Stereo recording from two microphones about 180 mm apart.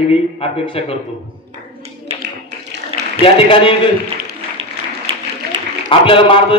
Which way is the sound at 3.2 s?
30° left (ahead or behind).